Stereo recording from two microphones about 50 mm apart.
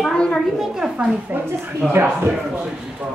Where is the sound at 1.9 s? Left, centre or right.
Right.